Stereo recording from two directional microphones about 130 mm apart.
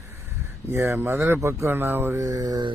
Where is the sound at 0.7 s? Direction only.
20° right (ahead or behind).